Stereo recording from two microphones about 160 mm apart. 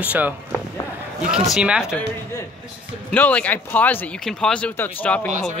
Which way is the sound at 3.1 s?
10° left (ahead or behind).